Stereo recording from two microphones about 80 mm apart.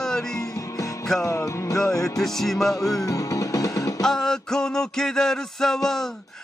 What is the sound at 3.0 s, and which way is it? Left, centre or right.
Music, left.